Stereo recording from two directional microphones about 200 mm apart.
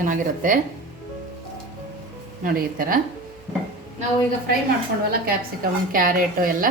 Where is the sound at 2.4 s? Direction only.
45° right (ahead or behind).